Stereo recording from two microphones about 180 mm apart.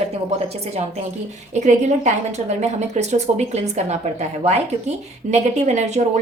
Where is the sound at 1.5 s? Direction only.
40° right (ahead or behind).